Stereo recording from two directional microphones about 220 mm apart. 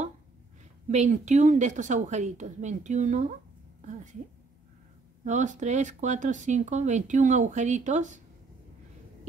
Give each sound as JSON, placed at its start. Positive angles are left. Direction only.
{"t": 0.8, "sound": "speech", "side_deg": -30}
{"t": 5.2, "sound": "speech", "side_deg": -35}